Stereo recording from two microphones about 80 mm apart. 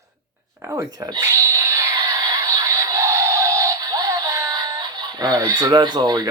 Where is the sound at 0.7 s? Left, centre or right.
Right.